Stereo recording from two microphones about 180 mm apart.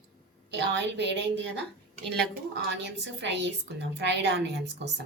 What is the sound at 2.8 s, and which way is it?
A woman's voice, 75° right (ahead or behind).